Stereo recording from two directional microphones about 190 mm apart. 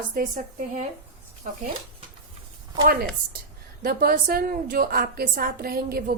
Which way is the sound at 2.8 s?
50° right (ahead or behind).